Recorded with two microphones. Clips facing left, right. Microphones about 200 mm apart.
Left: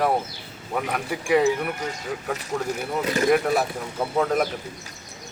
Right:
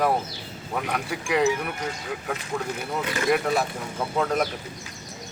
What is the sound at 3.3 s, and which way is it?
Speech, 5° left (ahead or behind).